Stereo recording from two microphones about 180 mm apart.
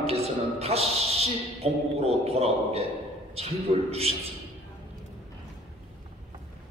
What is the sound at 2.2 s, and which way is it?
Speech, 35° right (ahead or behind).